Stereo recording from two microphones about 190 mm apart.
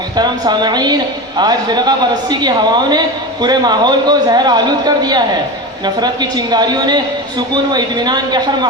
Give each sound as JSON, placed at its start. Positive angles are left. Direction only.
{"t": 0.2, "sound": "a woman's voice", "side_deg": -20}